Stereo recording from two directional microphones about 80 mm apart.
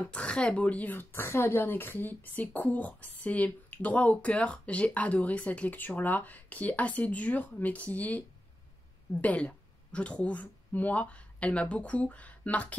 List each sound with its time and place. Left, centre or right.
0.0 s a woman's voice: centre